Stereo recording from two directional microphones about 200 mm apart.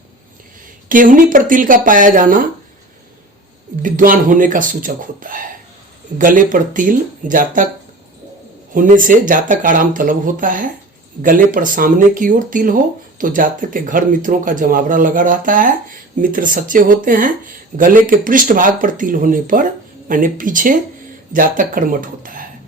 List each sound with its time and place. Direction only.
0.9 s speech: 40° right (ahead or behind)
3.8 s speech: 45° right (ahead or behind)
8.7 s speech: 40° right (ahead or behind)